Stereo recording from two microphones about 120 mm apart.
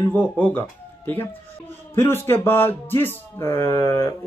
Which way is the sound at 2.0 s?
20° left (ahead or behind).